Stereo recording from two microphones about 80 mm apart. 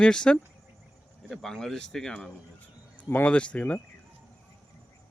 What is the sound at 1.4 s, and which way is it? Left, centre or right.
Speech, centre.